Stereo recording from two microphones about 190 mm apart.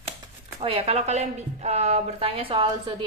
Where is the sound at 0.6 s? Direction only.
30° right (ahead or behind).